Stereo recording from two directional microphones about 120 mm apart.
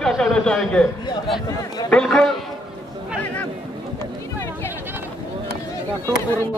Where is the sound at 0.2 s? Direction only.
5° left (ahead or behind).